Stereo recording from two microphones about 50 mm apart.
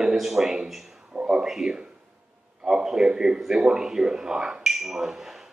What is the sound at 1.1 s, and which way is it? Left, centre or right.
A man's voice, centre.